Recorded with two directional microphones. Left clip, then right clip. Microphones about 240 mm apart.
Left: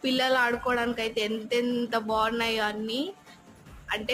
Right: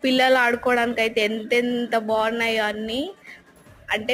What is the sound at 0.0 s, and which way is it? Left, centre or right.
A woman's voice, centre.